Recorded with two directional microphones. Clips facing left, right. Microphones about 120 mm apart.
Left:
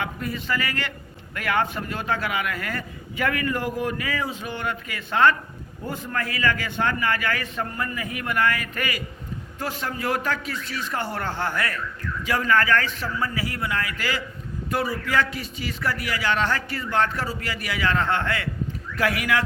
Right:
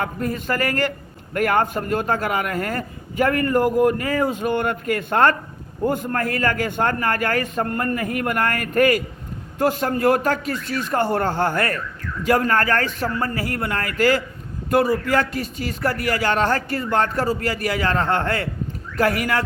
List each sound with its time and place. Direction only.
0.0 s a man's voice: 45° right (ahead or behind)